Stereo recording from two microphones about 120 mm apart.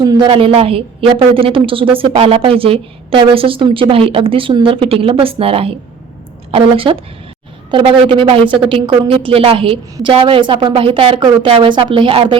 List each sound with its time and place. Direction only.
0.0 s a woman's voice: 30° right (ahead or behind)
0.3 s a woman's voice: 50° right (ahead or behind)